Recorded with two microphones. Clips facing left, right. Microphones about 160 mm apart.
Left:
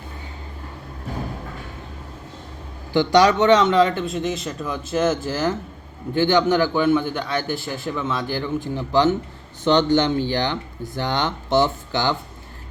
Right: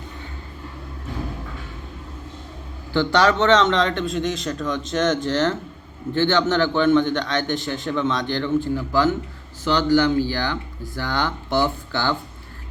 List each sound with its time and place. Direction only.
2.9 s a man's voice: 15° left (ahead or behind)
8.7 s speech: 20° left (ahead or behind)